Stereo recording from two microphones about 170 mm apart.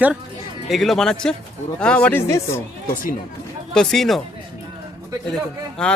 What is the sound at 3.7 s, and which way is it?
Speech, 5° left (ahead or behind).